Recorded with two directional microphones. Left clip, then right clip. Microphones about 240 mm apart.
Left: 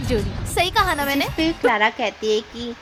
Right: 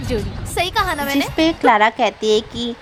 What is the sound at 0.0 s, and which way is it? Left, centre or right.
A woman's voice, centre.